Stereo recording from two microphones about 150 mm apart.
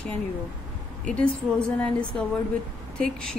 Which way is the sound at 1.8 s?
10° left (ahead or behind).